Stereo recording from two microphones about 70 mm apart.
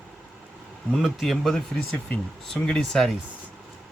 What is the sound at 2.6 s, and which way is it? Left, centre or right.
Speech, centre.